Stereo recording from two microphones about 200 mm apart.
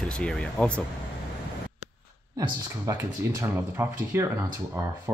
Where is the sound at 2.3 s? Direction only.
15° right (ahead or behind).